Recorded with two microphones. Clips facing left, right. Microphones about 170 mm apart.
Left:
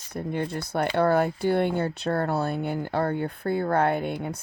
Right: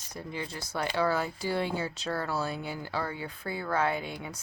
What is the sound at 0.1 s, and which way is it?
Speech, 55° left (ahead or behind).